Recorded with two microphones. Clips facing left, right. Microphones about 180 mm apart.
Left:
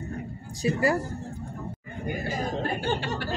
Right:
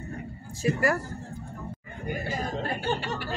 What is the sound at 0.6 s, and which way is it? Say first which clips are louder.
Speech: left 1 dB; 20° left (ahead or behind).